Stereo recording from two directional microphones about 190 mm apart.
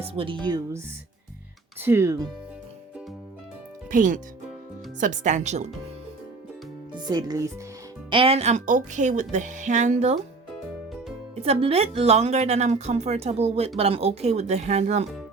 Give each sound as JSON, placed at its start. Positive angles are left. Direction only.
{"t": 0.2, "sound": "speech", "side_deg": -25}
{"t": 1.8, "sound": "speech", "side_deg": -15}
{"t": 3.8, "sound": "speech", "side_deg": -45}
{"t": 6.9, "sound": "speech", "side_deg": -20}
{"t": 8.1, "sound": "speech", "side_deg": -30}
{"t": 11.4, "sound": "speech", "side_deg": -30}